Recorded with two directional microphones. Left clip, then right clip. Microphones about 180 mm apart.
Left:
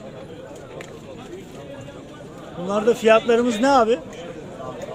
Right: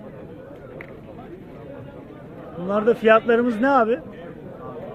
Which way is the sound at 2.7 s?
5° left (ahead or behind).